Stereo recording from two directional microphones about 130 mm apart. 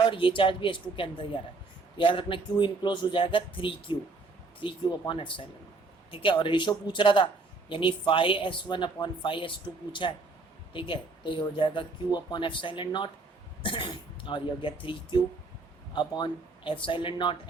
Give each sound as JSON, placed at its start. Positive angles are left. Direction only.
{"t": 0.0, "sound": "speech", "side_deg": 40}